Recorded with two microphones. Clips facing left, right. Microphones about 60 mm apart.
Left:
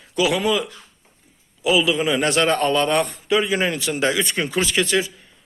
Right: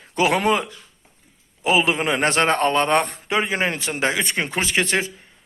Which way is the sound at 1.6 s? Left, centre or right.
Right.